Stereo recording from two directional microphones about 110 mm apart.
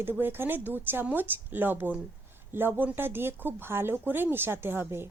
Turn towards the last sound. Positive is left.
turn(degrees=-20)  # may be behind; listen again after turning